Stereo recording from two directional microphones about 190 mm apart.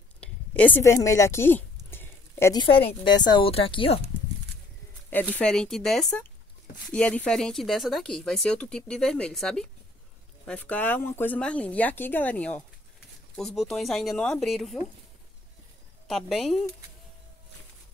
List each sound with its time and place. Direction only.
0.2 s a sound: 10° left (ahead or behind)
2.6 s speech: 30° left (ahead or behind)
5.3 s speech: 5° left (ahead or behind)
16.1 s speech: centre (ahead or behind)